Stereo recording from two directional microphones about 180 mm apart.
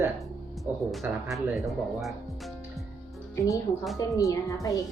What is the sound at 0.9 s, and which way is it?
Speech, centre (ahead or behind).